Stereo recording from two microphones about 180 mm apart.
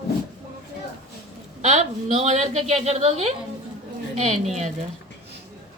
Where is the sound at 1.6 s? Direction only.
40° right (ahead or behind).